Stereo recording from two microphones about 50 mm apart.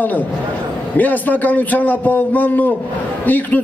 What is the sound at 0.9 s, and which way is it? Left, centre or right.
A man's voice, left.